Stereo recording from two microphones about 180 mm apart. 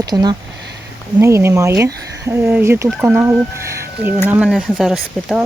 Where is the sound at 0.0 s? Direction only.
20° right (ahead or behind).